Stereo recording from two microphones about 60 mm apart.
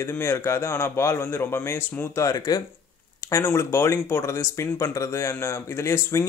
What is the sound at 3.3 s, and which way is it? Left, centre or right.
Speech, left.